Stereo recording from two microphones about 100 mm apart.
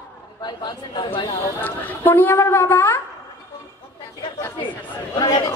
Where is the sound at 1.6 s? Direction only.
20° left (ahead or behind).